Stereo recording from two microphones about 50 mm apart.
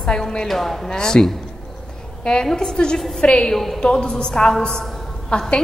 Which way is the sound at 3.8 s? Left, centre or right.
Centre.